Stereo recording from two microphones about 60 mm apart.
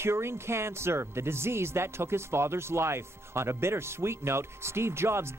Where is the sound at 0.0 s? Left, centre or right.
Right.